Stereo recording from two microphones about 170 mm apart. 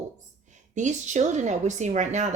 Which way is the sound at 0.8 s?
45° right (ahead or behind).